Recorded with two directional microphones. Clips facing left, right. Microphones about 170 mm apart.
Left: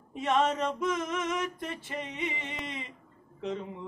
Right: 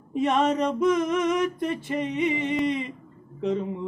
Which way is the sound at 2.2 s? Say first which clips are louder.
Right 12 dB; 60° right (ahead or behind).